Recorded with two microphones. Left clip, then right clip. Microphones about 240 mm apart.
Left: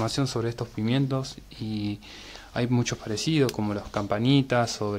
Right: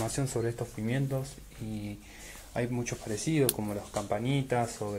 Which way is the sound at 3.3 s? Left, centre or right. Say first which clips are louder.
Left 4 dB; left.